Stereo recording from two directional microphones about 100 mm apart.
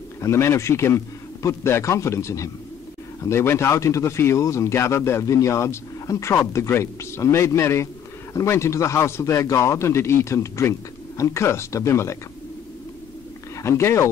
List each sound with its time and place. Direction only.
0.2 s speech: 30° left (ahead or behind)
13.6 s speech: 25° left (ahead or behind)